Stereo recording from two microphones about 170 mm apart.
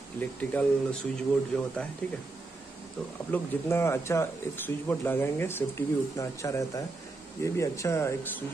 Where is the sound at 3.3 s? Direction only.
15° left (ahead or behind).